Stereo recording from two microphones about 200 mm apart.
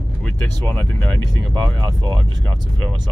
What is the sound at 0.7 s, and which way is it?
Speech, 10° left (ahead or behind).